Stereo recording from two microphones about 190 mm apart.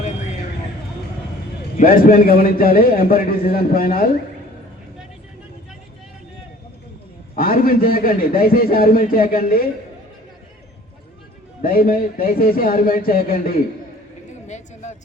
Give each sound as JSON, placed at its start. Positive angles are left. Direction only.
{"t": 1.8, "sound": "a man's voice", "side_deg": 50}
{"t": 7.3, "sound": "a man's voice", "side_deg": 50}
{"t": 11.6, "sound": "a man's voice", "side_deg": 50}
{"t": 14.4, "sound": "a sound", "side_deg": 35}